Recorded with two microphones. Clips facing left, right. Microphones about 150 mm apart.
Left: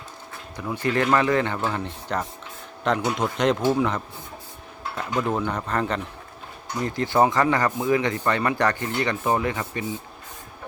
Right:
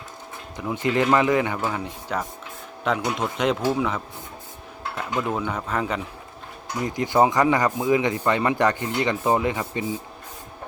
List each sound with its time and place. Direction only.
0.5 s speech: 20° right (ahead or behind)
1.5 s speech: 5° right (ahead or behind)
6.8 s speech: 15° right (ahead or behind)